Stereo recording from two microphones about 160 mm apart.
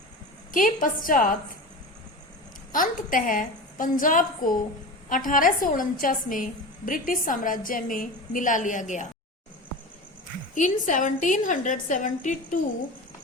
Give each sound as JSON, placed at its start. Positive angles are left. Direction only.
{"t": 0.5, "sound": "a woman's voice", "side_deg": 60}
{"t": 2.7, "sound": "a woman's voice", "side_deg": 55}
{"t": 10.5, "sound": "a woman's voice", "side_deg": 55}